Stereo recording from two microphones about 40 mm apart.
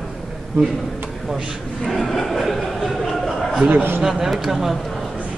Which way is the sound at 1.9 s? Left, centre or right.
Centre.